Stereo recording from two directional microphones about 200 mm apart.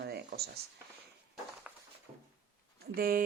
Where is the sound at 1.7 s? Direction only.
5° right (ahead or behind).